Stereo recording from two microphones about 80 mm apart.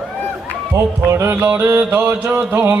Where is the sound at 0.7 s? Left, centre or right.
Right.